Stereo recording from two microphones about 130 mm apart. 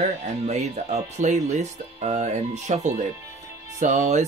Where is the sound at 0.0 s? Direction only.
60° right (ahead or behind).